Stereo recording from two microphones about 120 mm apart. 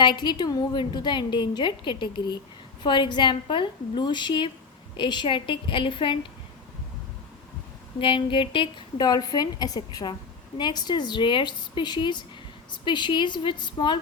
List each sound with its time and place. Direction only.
0.0 s a woman's voice: 40° left (ahead or behind)
7.9 s a woman's voice: 45° left (ahead or behind)